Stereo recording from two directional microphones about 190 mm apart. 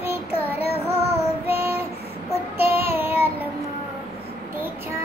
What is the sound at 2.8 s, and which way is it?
Child singing, 10° right (ahead or behind).